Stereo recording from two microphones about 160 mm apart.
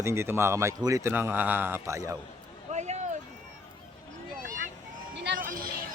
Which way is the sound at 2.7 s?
45° right (ahead or behind).